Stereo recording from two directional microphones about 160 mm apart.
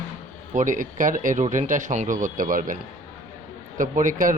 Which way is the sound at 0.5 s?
55° right (ahead or behind).